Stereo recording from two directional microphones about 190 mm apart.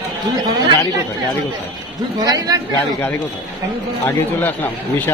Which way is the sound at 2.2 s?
20° right (ahead or behind).